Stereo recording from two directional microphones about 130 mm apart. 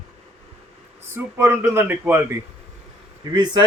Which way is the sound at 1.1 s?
20° right (ahead or behind).